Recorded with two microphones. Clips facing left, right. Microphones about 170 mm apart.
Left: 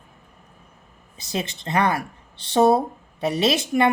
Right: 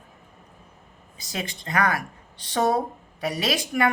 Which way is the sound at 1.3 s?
25° left (ahead or behind).